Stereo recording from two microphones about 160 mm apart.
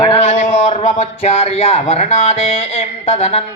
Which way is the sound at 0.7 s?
35° left (ahead or behind).